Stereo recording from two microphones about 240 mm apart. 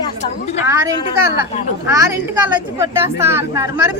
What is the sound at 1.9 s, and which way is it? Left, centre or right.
A man's voice, centre.